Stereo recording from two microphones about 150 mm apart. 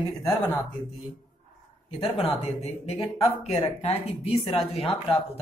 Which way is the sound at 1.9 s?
40° left (ahead or behind).